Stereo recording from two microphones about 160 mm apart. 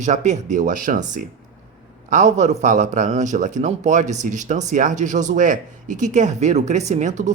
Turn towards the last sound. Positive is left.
turn(degrees=-50)  # may be behind; listen again after turning